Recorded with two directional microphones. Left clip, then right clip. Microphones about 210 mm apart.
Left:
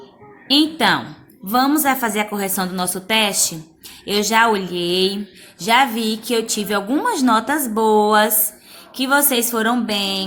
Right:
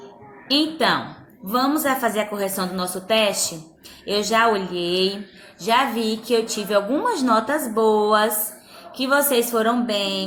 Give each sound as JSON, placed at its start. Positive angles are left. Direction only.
{"t": 0.4, "sound": "speech", "side_deg": 45}